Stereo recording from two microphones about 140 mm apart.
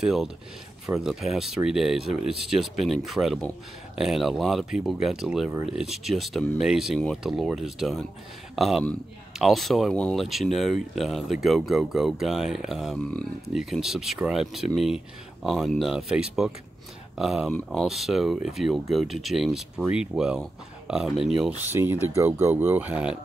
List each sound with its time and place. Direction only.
0.0 s speech: centre (ahead or behind)